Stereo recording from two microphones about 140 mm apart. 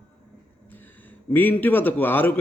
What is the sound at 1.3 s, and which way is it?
Speech, 15° left (ahead or behind).